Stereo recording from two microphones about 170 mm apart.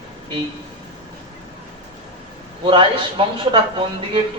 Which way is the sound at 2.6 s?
30° right (ahead or behind).